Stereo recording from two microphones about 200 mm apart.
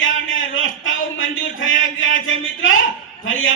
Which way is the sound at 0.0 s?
75° left (ahead or behind).